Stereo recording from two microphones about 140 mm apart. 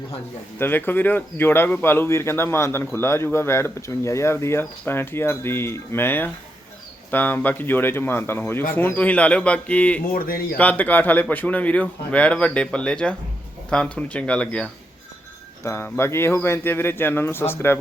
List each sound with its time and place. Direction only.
0.6 s speech: 15° left (ahead or behind)
10.1 s speech: 90° left
10.6 s speech: 10° left (ahead or behind)
15.6 s speech: 20° left (ahead or behind)